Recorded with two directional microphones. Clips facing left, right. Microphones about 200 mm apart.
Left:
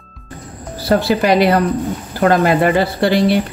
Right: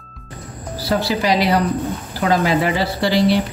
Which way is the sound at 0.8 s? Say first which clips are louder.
Left 5 dB; 55° left (ahead or behind).